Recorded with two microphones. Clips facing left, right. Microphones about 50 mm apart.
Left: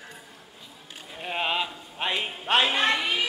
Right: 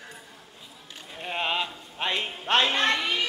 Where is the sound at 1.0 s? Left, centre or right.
Centre.